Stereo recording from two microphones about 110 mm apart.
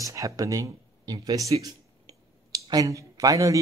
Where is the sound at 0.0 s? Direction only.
30° right (ahead or behind).